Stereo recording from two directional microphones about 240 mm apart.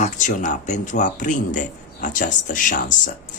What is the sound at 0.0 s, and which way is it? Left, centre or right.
Speech, left.